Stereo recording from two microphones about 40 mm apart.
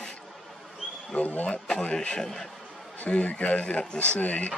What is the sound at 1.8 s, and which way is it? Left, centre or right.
Speech, left.